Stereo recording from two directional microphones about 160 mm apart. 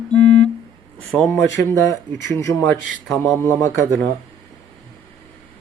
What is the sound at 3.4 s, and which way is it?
Speech, 20° left (ahead or behind).